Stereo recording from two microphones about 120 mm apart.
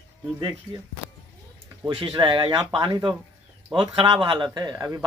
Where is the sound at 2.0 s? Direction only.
40° right (ahead or behind).